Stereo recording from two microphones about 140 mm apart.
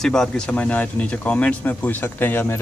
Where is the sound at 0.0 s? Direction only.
5° left (ahead or behind).